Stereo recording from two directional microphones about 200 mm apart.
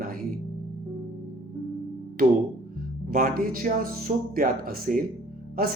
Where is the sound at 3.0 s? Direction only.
45° right (ahead or behind).